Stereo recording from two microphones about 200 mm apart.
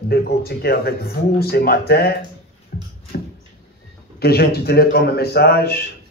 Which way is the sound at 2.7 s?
50° left (ahead or behind).